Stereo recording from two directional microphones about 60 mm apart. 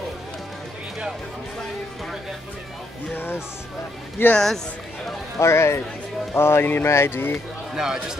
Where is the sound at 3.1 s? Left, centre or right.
Left.